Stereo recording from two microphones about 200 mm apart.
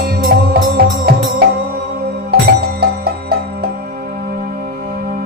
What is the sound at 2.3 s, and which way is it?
Music, 55° right (ahead or behind).